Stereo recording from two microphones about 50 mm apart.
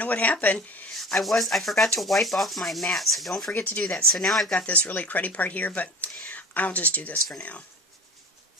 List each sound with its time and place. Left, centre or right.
0.0 s speech: left
1.0 s sanding: centre
3.8 s speech: centre
4.6 s speech: left